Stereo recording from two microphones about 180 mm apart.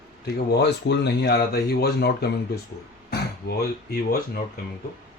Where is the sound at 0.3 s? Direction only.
70° left (ahead or behind).